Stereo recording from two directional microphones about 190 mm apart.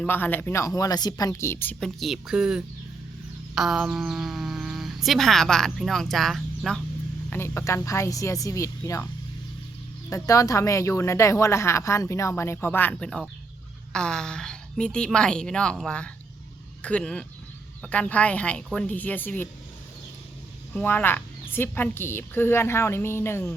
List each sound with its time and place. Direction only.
0.0 s a woman's voice: 10° left (ahead or behind)
7.3 s a woman's voice: 15° left (ahead or behind)
10.1 s a woman's voice: 15° left (ahead or behind)
20.7 s a woman's voice: 10° left (ahead or behind)